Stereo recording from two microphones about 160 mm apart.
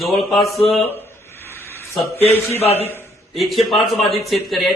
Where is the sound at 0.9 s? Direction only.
15° left (ahead or behind).